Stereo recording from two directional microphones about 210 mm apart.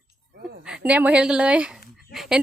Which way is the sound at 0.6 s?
5° right (ahead or behind).